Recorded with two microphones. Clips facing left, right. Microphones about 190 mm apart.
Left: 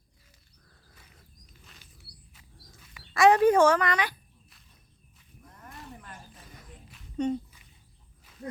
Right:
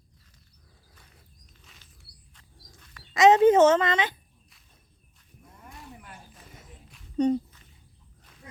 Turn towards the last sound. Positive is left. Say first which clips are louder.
# right 5 dB
turn(degrees=-35)  # may be behind; listen again after turning